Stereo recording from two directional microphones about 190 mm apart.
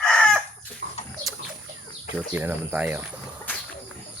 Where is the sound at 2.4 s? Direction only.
10° right (ahead or behind).